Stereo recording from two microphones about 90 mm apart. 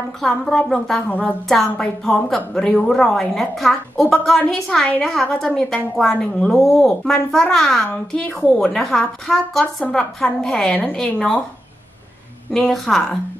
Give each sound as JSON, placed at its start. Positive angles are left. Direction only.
{"t": 0.2, "sound": "a woman's voice", "side_deg": 5}
{"t": 1.0, "sound": "speech", "side_deg": 15}
{"t": 1.5, "sound": "a woman's voice", "side_deg": 5}
{"t": 12.5, "sound": "a woman's voice", "side_deg": 5}